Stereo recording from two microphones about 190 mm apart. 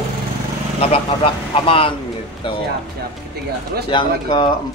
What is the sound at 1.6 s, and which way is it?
Speech, 30° left (ahead or behind).